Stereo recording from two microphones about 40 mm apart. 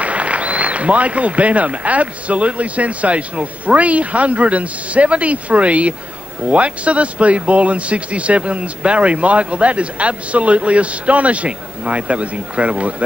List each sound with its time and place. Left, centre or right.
0.0 s a man's voice: right